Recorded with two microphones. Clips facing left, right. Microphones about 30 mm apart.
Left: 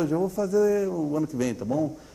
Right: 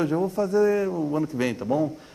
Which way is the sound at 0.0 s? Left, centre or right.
Right.